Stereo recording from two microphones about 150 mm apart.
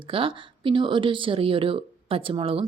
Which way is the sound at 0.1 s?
35° right (ahead or behind).